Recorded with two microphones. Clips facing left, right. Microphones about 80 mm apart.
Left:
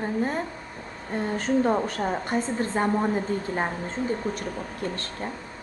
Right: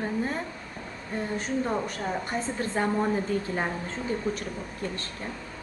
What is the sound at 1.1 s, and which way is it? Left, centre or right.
A woman's voice, left.